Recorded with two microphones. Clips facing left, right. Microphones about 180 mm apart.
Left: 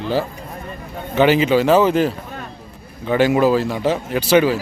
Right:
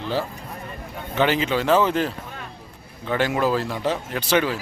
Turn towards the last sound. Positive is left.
turn(degrees=10)  # may be behind; listen again after turning